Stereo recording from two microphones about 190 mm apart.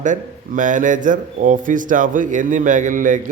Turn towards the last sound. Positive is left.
turn(degrees=-45)  # may be behind; listen again after turning